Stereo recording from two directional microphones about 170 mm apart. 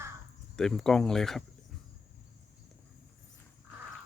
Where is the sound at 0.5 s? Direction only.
5° left (ahead or behind).